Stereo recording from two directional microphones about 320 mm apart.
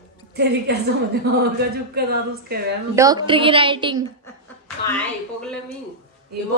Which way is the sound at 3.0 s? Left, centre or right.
Centre.